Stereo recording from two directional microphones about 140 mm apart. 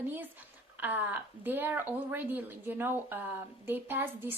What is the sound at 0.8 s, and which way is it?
A woman's voice, 15° right (ahead or behind).